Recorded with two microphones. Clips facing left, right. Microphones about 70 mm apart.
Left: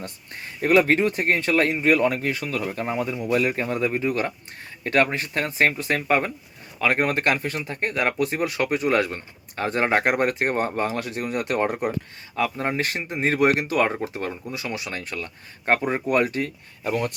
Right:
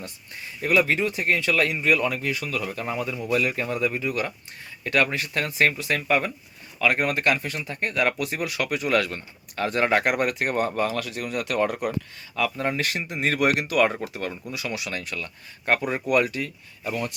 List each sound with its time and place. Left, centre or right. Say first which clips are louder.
0.0 s speech: left 2 dB; left